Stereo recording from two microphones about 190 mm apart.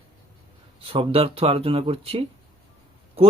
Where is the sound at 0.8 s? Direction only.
30° right (ahead or behind).